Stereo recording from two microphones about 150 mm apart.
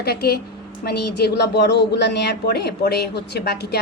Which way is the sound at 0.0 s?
90° left.